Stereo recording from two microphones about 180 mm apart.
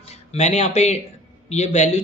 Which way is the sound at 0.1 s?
40° left (ahead or behind).